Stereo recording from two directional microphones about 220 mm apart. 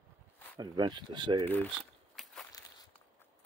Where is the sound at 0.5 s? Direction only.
20° right (ahead or behind).